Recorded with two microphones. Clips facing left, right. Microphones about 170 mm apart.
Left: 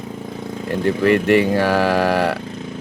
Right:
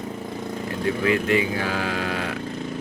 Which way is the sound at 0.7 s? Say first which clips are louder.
Left 7 dB; 70° left (ahead or behind).